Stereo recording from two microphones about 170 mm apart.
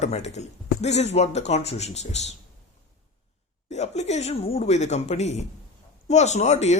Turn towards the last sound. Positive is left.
turn(degrees=40)  # may be behind; listen again after turning